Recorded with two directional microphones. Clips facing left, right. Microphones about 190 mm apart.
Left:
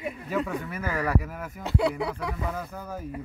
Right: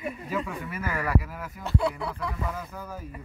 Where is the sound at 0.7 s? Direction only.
40° left (ahead or behind).